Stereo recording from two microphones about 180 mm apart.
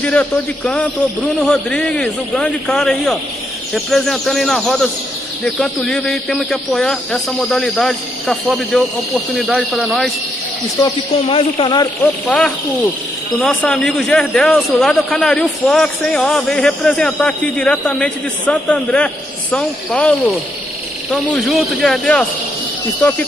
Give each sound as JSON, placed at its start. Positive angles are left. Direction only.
{"t": 0.0, "sound": "a man's voice", "side_deg": 5}
{"t": 10.8, "sound": "speech", "side_deg": 30}
{"t": 12.0, "sound": "a man's voice", "side_deg": 5}